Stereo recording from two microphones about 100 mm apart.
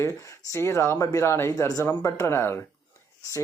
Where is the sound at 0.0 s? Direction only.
30° left (ahead or behind).